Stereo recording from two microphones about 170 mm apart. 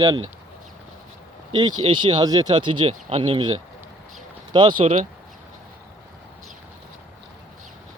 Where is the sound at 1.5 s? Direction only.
25° right (ahead or behind).